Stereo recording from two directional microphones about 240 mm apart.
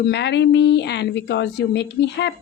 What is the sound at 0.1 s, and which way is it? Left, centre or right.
A woman's voice, left.